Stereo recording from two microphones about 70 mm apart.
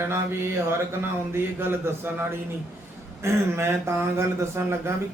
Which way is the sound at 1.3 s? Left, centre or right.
Right.